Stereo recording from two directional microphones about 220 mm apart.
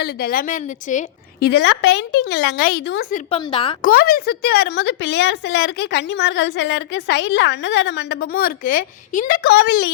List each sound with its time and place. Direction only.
0.0 s a woman's voice: 45° left (ahead or behind)
1.5 s a woman's voice: 50° left (ahead or behind)
3.2 s a woman's voice: 30° left (ahead or behind)
3.8 s a woman's voice: 40° left (ahead or behind)